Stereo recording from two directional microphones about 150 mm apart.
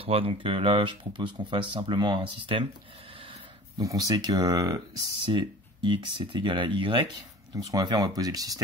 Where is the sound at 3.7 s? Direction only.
25° right (ahead or behind).